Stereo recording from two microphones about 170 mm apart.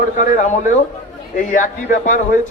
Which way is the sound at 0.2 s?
45° left (ahead or behind).